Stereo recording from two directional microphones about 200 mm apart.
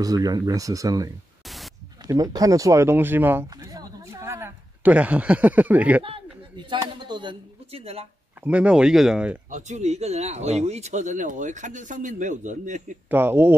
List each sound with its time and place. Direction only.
0.0 s speech: 20° right (ahead or behind)
6.0 s a man's voice: 25° right (ahead or behind)
8.5 s speech: 5° right (ahead or behind)
9.5 s speech: 35° right (ahead or behind)
13.1 s speech: 10° right (ahead or behind)